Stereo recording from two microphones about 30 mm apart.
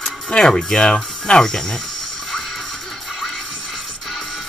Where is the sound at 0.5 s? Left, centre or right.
Left.